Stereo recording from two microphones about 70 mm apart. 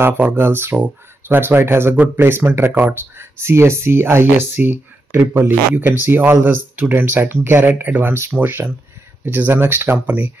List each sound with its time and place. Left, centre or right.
0.0 s speech: right
9.9 s speech: centre